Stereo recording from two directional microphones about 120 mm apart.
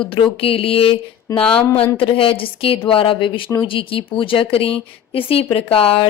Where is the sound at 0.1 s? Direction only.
50° left (ahead or behind).